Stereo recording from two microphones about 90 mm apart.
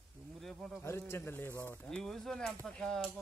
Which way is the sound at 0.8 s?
30° left (ahead or behind).